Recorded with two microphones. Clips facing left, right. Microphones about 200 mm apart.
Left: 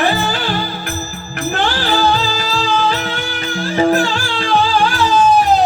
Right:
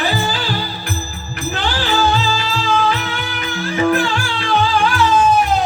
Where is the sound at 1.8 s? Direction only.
40° left (ahead or behind).